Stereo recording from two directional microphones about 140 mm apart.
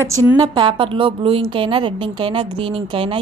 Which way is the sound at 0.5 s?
35° right (ahead or behind).